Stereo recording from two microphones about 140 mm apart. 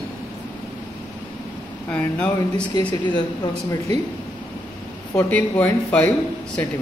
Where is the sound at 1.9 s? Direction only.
10° left (ahead or behind).